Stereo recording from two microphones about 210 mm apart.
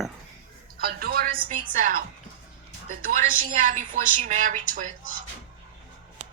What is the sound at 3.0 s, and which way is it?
A woman's voice, 40° right (ahead or behind).